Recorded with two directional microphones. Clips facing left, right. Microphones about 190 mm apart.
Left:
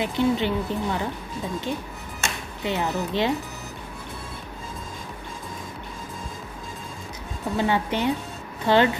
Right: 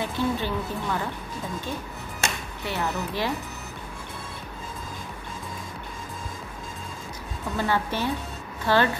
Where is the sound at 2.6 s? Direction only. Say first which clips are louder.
Left 3 dB; 20° left (ahead or behind).